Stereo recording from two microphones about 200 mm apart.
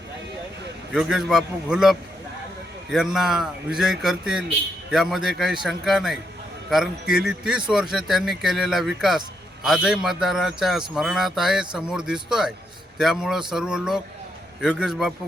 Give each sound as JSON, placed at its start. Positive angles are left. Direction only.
{"t": 0.9, "sound": "a man's voice", "side_deg": 0}